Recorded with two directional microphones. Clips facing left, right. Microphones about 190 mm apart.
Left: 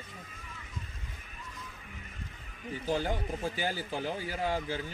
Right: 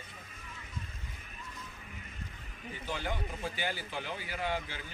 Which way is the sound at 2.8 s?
35° left (ahead or behind).